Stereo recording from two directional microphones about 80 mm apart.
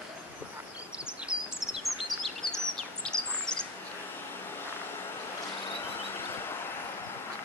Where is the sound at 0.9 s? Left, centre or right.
Centre.